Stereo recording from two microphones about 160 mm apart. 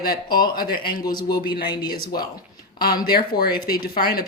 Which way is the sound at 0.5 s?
65° left (ahead or behind).